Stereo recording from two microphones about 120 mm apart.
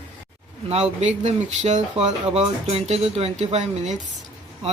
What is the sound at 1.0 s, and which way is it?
Speech, 75° right (ahead or behind).